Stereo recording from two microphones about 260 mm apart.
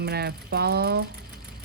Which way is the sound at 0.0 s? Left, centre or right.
Right.